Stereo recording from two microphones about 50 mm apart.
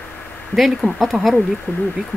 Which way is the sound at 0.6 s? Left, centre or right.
Centre.